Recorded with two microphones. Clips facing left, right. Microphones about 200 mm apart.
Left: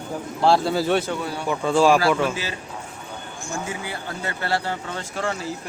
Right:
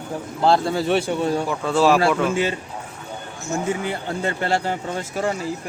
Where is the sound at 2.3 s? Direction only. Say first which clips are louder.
Right 9 dB; 25° right (ahead or behind).